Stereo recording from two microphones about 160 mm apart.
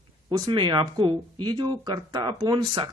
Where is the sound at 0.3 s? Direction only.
30° right (ahead or behind).